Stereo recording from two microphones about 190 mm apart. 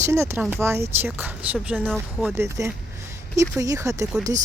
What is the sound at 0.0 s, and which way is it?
Speech, 15° right (ahead or behind).